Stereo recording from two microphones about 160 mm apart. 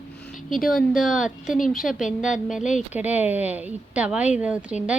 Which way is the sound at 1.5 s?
55° left (ahead or behind).